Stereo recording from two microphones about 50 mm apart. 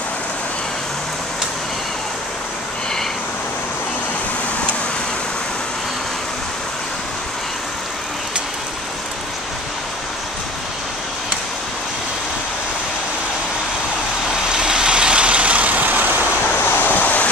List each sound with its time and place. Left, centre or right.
14.5 s vehicle: centre; by 16.1 s right
16.4 s waves: left